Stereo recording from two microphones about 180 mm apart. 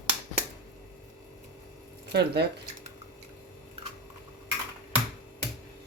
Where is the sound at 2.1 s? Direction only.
65° right (ahead or behind).